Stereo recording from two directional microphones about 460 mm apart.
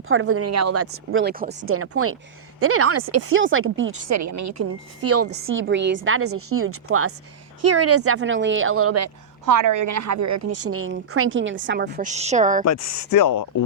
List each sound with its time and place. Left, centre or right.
0.1 s a woman's voice: right
4.2 s a woman's voice: right
9.5 s a woman's voice: right; by 12.6 s centre
12.6 s speech: left